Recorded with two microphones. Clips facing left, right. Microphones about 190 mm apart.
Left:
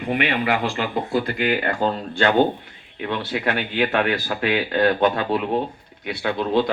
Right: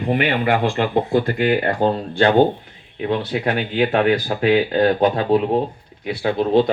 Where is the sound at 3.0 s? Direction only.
30° right (ahead or behind).